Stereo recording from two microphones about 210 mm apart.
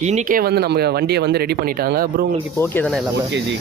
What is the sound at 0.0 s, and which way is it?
Speech, 35° right (ahead or behind).